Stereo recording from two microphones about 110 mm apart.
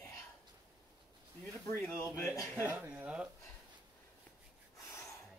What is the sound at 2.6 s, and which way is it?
Speech, 15° right (ahead or behind).